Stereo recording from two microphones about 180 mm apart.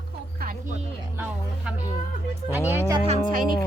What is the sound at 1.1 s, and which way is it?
Music, 10° right (ahead or behind).